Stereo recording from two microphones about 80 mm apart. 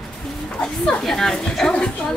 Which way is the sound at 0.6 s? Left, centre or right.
Centre.